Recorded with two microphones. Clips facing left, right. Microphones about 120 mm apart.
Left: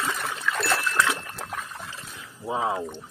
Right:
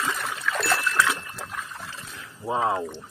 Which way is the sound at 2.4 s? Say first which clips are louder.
Right 2 dB; centre (ahead or behind).